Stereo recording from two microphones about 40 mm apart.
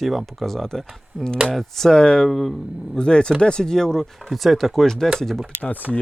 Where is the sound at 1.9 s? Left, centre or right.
Left.